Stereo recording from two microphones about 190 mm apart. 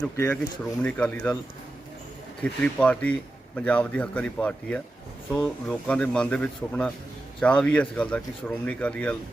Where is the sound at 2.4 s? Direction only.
5° left (ahead or behind).